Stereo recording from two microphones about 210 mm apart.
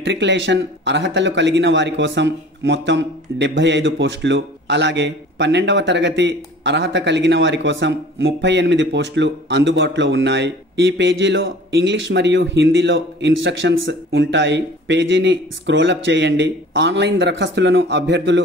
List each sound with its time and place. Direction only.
0.0 s speech: 60° right (ahead or behind)